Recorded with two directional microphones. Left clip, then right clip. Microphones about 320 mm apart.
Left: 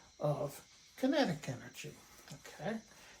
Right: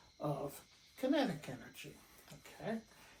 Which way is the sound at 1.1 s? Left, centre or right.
Left.